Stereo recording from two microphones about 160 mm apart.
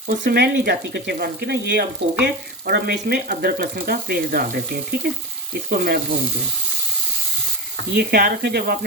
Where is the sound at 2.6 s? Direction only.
70° right (ahead or behind).